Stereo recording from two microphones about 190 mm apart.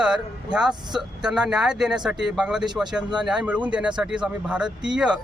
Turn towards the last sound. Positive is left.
turn(degrees=-5)  # may be behind; listen again after turning